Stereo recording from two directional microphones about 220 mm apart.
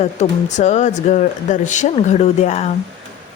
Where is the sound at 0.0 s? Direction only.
30° left (ahead or behind).